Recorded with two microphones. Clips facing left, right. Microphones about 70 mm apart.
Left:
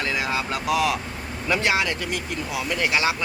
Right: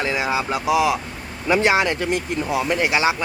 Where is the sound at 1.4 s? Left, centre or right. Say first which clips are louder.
Right 5 dB; right.